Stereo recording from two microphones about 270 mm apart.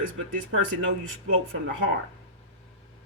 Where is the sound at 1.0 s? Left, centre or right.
Right.